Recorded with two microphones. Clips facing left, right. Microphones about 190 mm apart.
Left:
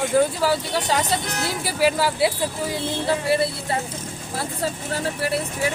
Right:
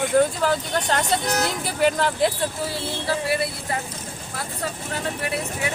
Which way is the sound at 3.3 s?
25° left (ahead or behind).